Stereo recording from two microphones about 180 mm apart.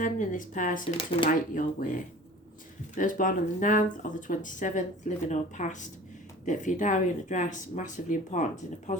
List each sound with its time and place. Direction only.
0.0 s speech: 45° left (ahead or behind)
0.9 s speech: 30° left (ahead or behind)
1.3 s speech: 50° left (ahead or behind)